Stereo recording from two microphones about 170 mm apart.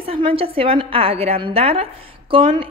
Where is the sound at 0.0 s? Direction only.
35° right (ahead or behind).